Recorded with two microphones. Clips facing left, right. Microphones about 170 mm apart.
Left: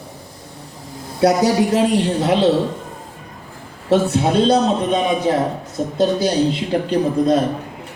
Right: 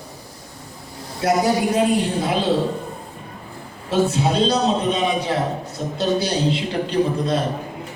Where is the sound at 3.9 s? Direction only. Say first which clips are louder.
Left 3 dB; 60° left (ahead or behind).